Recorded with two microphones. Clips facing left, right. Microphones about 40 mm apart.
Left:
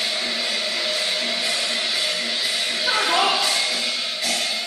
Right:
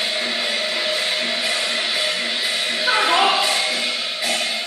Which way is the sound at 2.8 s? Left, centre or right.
Right.